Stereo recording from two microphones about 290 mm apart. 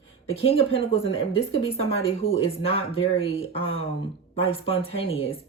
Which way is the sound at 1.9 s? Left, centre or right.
Left.